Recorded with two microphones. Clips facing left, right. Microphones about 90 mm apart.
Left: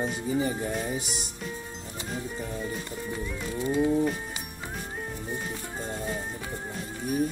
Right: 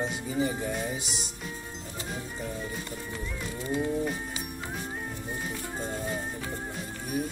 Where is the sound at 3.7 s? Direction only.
Centre (ahead or behind).